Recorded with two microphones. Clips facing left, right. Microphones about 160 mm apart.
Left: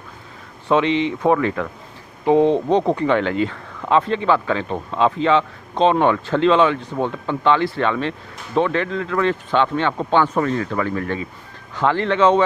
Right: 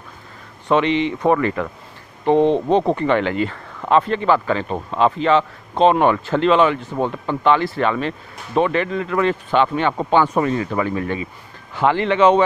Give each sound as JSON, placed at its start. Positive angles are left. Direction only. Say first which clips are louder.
{"t": 0.7, "sound": "speech", "louder": "even", "side_deg": 0}